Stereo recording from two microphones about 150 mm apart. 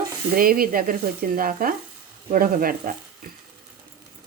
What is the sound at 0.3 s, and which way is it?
Speech, 75° right (ahead or behind).